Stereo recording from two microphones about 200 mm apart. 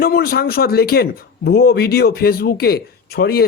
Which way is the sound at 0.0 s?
50° left (ahead or behind).